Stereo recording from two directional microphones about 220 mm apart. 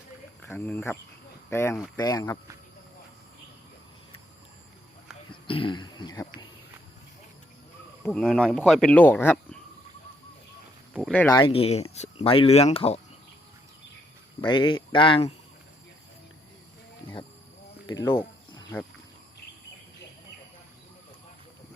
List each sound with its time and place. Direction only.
0.4 s speech: 10° left (ahead or behind)
5.3 s speech: 25° left (ahead or behind)
8.0 s speech: 5° left (ahead or behind)
10.9 s speech: centre (ahead or behind)
11.3 s speech: 25° left (ahead or behind)
14.4 s speech: 20° left (ahead or behind)
17.8 s a sound: 15° left (ahead or behind)